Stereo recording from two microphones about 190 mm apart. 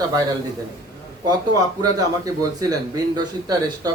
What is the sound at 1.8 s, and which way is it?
A man's voice, 20° right (ahead or behind).